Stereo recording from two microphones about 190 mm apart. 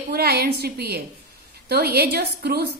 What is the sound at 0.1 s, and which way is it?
A woman's voice, 55° right (ahead or behind).